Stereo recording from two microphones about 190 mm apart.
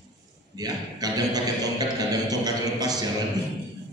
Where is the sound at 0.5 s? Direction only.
20° right (ahead or behind).